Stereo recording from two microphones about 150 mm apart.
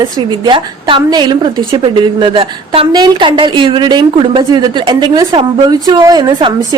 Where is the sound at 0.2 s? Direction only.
30° right (ahead or behind).